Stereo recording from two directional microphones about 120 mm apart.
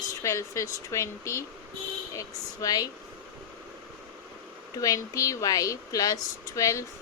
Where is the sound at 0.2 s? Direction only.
25° left (ahead or behind).